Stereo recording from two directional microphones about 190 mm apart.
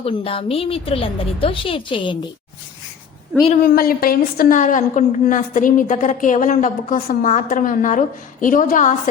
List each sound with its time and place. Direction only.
0.0 s a woman's voice: 30° left (ahead or behind)
3.6 s a woman's voice: 50° left (ahead or behind)